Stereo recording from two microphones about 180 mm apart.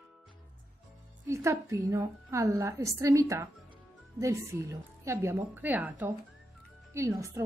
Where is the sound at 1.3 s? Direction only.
15° right (ahead or behind).